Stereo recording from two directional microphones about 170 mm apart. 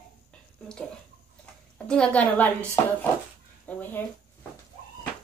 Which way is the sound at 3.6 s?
10° left (ahead or behind).